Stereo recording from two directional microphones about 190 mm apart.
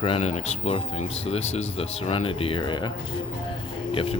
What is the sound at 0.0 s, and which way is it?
Speech, 35° left (ahead or behind).